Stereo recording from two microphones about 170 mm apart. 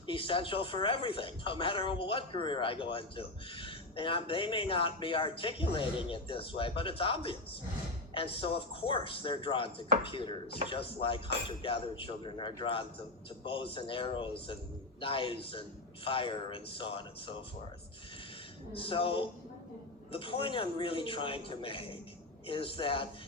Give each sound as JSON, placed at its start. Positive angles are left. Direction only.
{"t": 0.1, "sound": "speech", "side_deg": 30}
{"t": 18.7, "sound": "speech", "side_deg": 30}